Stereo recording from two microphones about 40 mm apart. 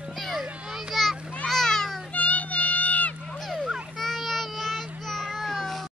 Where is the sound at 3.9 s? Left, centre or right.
Centre.